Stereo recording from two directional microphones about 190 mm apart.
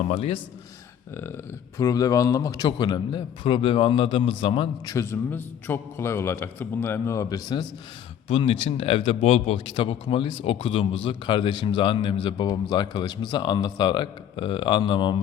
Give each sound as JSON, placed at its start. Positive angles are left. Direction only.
{"t": 0.1, "sound": "a man's voice", "side_deg": 35}
{"t": 1.1, "sound": "a man's voice", "side_deg": 10}
{"t": 4.9, "sound": "a man's voice", "side_deg": 10}